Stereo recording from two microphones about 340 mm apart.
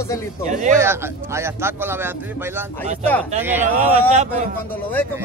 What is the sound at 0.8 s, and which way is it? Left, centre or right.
Speech, centre.